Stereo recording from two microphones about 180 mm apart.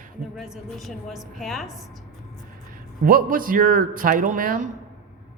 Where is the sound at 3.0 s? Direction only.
50° right (ahead or behind).